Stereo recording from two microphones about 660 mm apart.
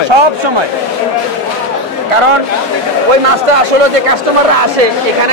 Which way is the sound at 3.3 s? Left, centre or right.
Right.